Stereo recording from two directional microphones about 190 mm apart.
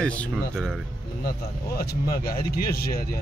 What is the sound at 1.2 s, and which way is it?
Speech, 55° left (ahead or behind).